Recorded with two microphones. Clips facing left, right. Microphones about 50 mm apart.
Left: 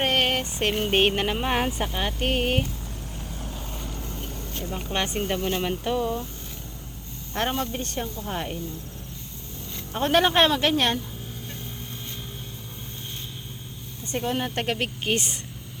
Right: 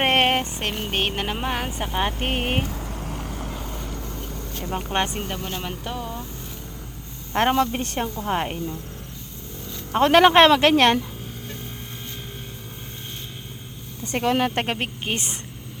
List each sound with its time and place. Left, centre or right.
0.0 s a sound: right
0.3 s music: right
0.6 s speech: centre
1.9 s speech: right
2.6 s vehicle: right
4.9 s speech: right
5.3 s speech: centre
7.3 s speech: right
7.7 s speech: right
9.9 s speech: right
14.0 s speech: right
14.5 s speech: right
15.0 s speech: centre